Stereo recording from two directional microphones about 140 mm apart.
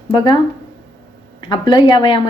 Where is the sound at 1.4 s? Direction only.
30° left (ahead or behind).